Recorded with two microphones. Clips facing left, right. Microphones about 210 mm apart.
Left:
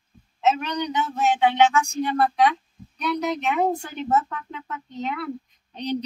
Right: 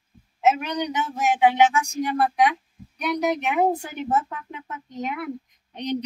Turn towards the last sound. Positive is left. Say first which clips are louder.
# even
turn(degrees=-15)  # may be behind; listen again after turning